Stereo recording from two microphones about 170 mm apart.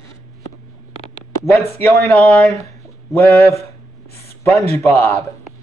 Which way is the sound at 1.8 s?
10° left (ahead or behind).